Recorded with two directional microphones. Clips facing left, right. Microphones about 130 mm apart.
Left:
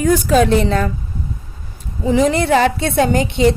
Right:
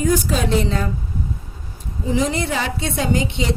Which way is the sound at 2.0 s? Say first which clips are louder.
Left 6 dB; 65° left (ahead or behind).